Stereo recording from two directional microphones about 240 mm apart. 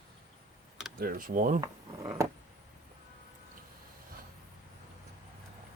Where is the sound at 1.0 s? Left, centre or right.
Right.